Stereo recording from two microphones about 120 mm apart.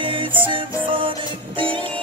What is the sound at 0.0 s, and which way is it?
Music, 45° right (ahead or behind).